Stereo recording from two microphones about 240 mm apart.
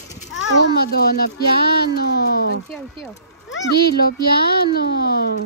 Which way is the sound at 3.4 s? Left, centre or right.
Left.